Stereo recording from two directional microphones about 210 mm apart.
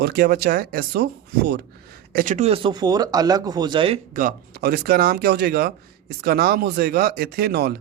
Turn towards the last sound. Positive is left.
turn(degrees=-50)  # may be behind; listen again after turning